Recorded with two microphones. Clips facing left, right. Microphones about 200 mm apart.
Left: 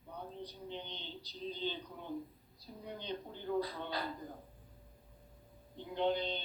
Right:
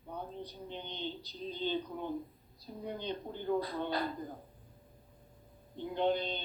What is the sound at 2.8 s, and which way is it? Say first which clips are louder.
Speech: right 4 dB; 50° right (ahead or behind).